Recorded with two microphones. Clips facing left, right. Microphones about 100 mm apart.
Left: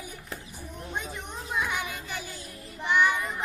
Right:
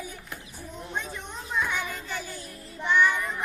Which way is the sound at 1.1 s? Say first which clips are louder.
Right 1 dB; 15° left (ahead or behind).